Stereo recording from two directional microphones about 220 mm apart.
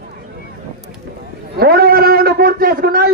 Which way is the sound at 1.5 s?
45° right (ahead or behind).